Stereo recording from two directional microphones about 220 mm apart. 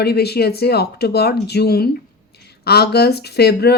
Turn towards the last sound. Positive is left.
turn(degrees=45)  # may be behind; listen again after turning